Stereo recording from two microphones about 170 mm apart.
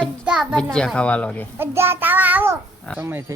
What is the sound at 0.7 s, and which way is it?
Speech, 5° left (ahead or behind).